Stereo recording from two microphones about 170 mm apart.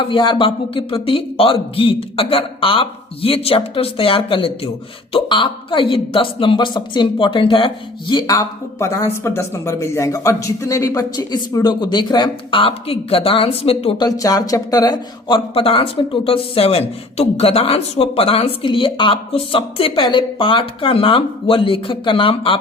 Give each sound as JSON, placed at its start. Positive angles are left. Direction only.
{"t": 0.0, "sound": "a woman's voice", "side_deg": 30}
{"t": 14.2, "sound": "speech", "side_deg": 20}